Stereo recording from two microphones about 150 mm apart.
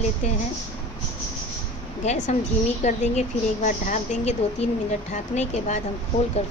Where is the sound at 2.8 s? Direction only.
50° left (ahead or behind).